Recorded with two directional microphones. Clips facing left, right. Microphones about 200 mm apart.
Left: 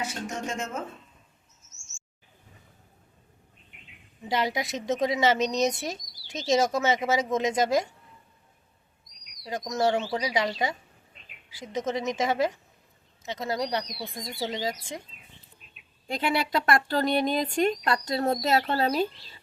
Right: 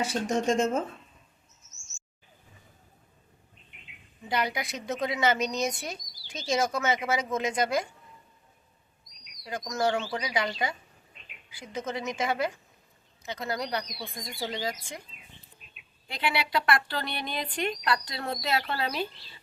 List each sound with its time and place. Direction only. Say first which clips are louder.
0.1 s speech: right 7 dB; 30° right (ahead or behind)
4.3 s a woman's voice: left 3 dB; 25° left (ahead or behind)
9.4 s a woman's voice: left 3 dB; 20° left (ahead or behind)
15.7 s speech: left 10 dB; 45° left (ahead or behind)